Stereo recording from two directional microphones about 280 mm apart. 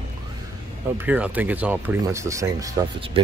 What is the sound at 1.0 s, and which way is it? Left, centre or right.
Speech, centre.